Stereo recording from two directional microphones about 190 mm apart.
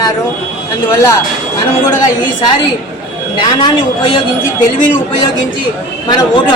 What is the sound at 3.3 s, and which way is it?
Speech, 25° left (ahead or behind).